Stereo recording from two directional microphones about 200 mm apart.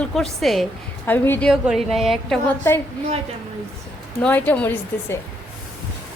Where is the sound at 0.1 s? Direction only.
Centre (ahead or behind).